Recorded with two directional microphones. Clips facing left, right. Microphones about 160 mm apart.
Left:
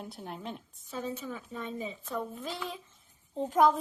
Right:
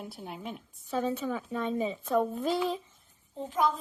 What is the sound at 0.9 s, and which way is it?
A woman's voice, 75° right (ahead or behind).